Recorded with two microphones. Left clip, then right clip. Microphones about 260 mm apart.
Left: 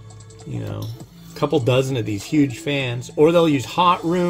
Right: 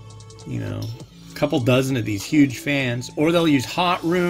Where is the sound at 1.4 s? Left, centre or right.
Right.